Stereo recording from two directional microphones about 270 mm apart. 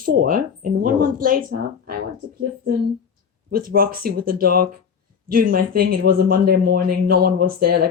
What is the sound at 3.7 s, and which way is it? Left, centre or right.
Speech, right.